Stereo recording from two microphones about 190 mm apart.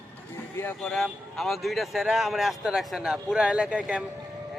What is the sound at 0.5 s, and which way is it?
Speech, 5° left (ahead or behind).